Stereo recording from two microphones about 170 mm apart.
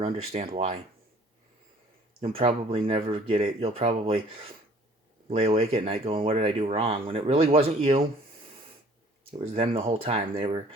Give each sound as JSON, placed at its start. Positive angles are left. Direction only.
{"t": 0.0, "sound": "speech", "side_deg": -35}
{"t": 2.2, "sound": "speech", "side_deg": -35}
{"t": 9.6, "sound": "speech", "side_deg": -35}